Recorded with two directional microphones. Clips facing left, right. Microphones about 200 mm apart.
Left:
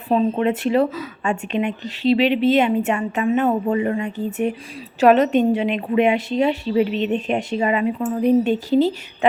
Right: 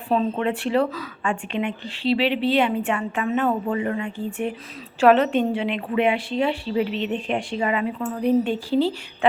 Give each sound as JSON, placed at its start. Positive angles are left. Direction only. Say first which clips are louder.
{"t": 0.1, "sound": "a woman's voice", "louder": "left 4 dB", "side_deg": 20}